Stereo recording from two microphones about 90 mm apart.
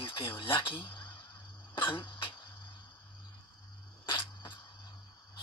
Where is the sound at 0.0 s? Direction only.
70° left (ahead or behind).